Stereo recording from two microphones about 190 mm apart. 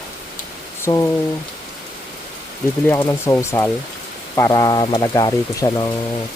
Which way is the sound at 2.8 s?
15° left (ahead or behind).